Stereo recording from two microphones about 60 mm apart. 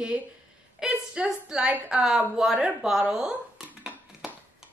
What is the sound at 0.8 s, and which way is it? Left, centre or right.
Speech, centre.